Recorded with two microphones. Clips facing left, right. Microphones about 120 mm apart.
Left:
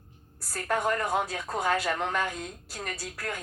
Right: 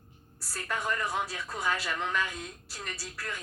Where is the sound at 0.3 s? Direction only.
50° left (ahead or behind).